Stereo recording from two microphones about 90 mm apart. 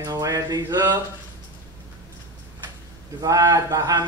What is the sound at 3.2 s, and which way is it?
Speech, 45° right (ahead or behind).